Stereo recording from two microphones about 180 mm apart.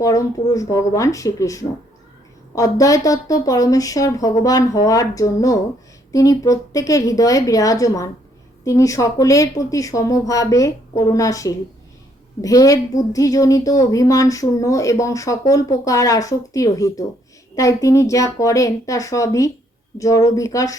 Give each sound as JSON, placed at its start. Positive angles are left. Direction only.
{"t": 0.0, "sound": "a woman's voice", "side_deg": 20}